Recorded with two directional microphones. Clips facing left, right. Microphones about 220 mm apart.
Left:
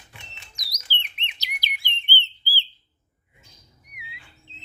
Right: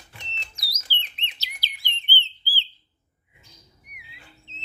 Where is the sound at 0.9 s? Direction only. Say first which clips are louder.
Left 2 dB; 15° left (ahead or behind).